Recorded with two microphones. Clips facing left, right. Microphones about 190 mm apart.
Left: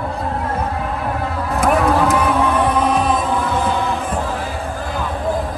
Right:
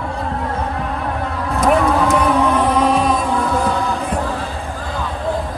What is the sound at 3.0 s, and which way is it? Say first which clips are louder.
Music: right 1 dB; centre (ahead or behind).